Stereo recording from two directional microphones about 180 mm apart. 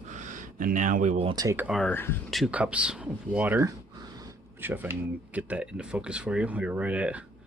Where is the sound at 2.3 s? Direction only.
5° right (ahead or behind).